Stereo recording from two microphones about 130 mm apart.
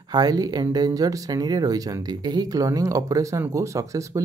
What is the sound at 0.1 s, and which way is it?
Speech, 30° right (ahead or behind).